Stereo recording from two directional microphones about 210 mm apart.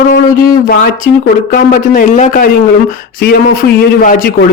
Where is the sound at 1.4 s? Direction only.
40° left (ahead or behind).